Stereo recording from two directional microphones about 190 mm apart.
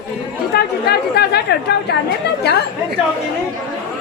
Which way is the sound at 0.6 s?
55° left (ahead or behind).